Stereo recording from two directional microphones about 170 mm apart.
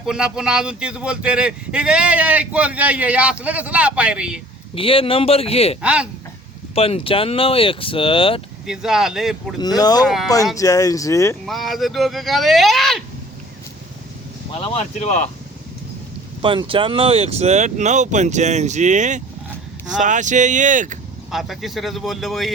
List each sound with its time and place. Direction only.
0.0 s speech: 5° right (ahead or behind)
4.7 s speech: 30° left (ahead or behind)
5.8 s speech: 5° right (ahead or behind)
6.7 s speech: 35° left (ahead or behind)
8.6 s speech: 5° right (ahead or behind)
9.6 s speech: 25° left (ahead or behind)
11.4 s speech: centre (ahead or behind)
14.7 s speech: 45° left (ahead or behind)
16.4 s speech: 30° right (ahead or behind); by 21.0 s 50° right (ahead or behind)
21.2 s speech: centre (ahead or behind)